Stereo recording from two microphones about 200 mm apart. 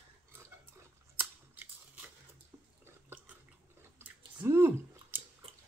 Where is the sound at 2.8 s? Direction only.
10° right (ahead or behind).